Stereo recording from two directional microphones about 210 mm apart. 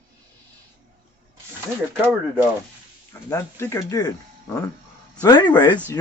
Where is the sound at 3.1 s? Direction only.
15° left (ahead or behind).